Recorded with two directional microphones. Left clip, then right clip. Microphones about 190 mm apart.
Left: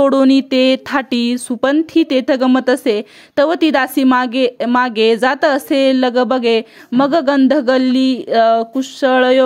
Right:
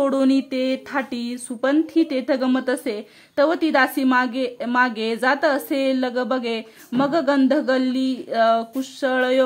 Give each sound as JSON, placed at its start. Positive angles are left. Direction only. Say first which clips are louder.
{"t": 0.0, "sound": "speech", "louder": "left 8 dB", "side_deg": 40}